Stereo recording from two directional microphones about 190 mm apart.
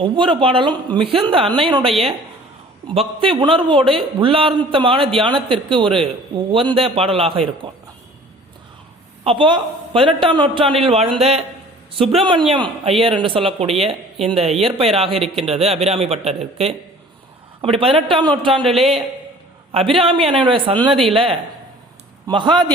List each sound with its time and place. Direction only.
0.0 s a man's voice: 25° right (ahead or behind)
3.2 s a man's voice: 25° right (ahead or behind)
9.2 s a man's voice: 25° right (ahead or behind)